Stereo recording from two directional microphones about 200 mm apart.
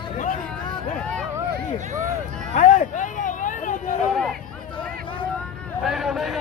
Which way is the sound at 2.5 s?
40° left (ahead or behind).